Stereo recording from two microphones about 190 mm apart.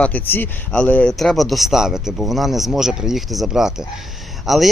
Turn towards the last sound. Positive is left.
turn(degrees=0)  # may be behind; listen again after turning